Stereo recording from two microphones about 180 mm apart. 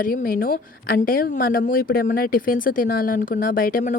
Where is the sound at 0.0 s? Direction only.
50° left (ahead or behind).